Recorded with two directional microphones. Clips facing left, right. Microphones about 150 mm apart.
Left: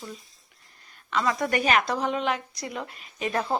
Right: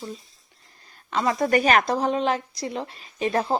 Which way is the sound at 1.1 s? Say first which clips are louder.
Right 4 dB; 30° right (ahead or behind).